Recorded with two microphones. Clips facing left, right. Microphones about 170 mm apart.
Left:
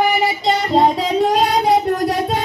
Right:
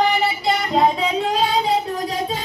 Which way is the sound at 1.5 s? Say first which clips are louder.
Left 5 dB; 70° left (ahead or behind).